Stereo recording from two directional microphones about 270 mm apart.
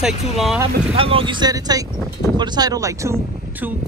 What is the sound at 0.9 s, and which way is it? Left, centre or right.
Speech, centre.